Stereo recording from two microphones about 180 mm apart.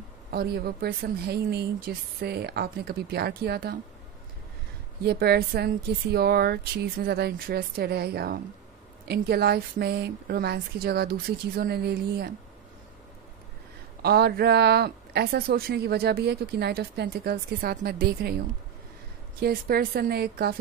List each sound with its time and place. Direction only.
0.3 s speech: 60° right (ahead or behind)
5.0 s speech: 60° right (ahead or behind)
14.0 s speech: 60° right (ahead or behind)
19.4 s speech: 55° right (ahead or behind)